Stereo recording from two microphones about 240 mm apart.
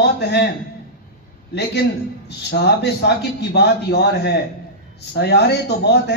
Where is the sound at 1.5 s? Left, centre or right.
Left.